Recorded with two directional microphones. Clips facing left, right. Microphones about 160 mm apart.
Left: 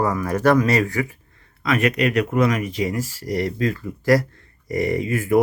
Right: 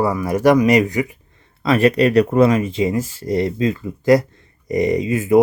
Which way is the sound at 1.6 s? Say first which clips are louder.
Right 6 dB; 30° right (ahead or behind).